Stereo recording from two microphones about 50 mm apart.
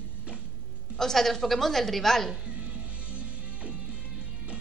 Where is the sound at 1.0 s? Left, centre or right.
Centre.